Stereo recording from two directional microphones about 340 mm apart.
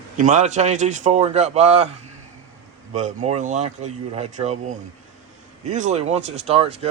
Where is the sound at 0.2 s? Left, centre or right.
Right.